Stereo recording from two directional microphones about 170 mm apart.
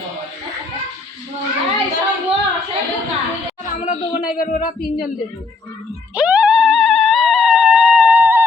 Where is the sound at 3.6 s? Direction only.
50° left (ahead or behind).